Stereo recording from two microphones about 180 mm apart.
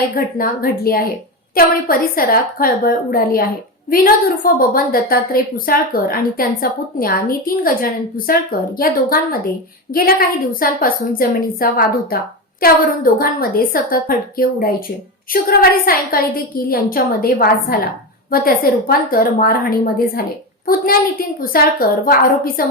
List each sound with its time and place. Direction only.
0.1 s a woman's voice: 55° left (ahead or behind)